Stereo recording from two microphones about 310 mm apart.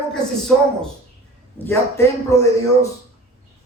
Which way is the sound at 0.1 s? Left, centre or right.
Centre.